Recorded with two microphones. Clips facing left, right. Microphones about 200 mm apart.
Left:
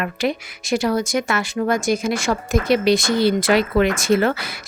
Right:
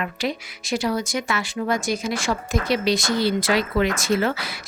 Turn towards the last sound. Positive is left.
turn(degrees=55)  # may be behind; listen again after turning